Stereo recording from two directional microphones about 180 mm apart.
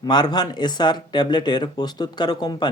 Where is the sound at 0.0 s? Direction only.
25° left (ahead or behind).